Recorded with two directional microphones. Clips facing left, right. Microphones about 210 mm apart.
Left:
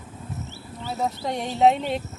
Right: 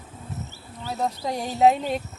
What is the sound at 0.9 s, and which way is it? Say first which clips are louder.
Speech: even; centre (ahead or behind).